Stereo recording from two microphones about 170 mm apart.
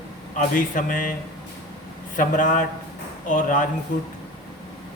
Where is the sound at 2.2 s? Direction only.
50° left (ahead or behind).